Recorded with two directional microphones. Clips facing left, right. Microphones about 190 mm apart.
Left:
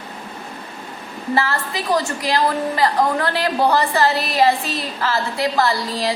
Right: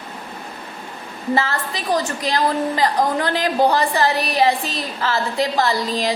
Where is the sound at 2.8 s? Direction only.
20° right (ahead or behind).